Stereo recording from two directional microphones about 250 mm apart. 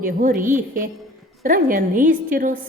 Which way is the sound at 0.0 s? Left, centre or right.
Right.